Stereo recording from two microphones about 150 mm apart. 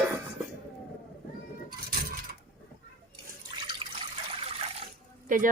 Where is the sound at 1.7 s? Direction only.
80° right.